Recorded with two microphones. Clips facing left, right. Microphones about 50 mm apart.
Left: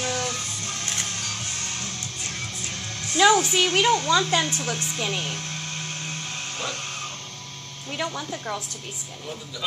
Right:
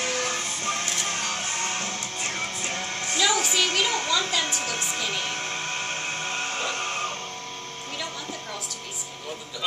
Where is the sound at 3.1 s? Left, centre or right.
Left.